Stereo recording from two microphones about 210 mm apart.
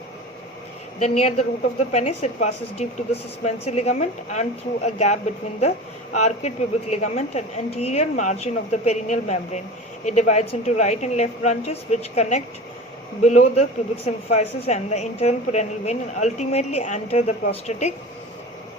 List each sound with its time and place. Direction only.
0.9 s a woman's voice: 35° left (ahead or behind)